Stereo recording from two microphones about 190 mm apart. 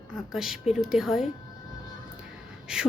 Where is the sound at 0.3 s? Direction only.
Centre (ahead or behind).